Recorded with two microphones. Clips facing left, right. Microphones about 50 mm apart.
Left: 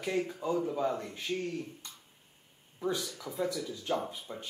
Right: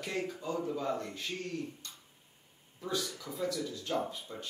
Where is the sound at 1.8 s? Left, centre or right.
Centre.